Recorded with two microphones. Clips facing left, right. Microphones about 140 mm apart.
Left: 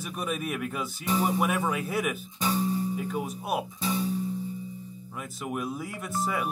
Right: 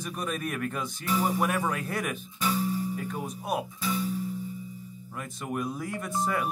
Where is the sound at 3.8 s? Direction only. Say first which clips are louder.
Left 1 dB; 30° left (ahead or behind).